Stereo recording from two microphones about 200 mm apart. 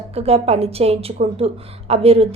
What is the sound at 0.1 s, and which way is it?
A woman's voice, 30° right (ahead or behind).